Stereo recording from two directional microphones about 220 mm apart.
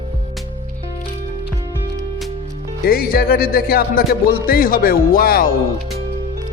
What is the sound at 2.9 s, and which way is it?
A man's voice, 40° left (ahead or behind).